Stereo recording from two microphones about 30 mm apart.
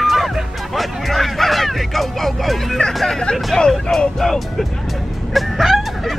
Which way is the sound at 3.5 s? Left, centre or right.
Left.